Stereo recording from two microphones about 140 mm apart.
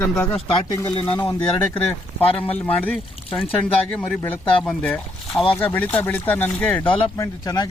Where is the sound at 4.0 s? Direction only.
15° left (ahead or behind).